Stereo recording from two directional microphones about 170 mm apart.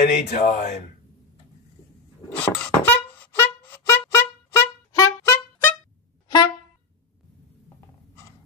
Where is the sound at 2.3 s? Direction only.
5° left (ahead or behind).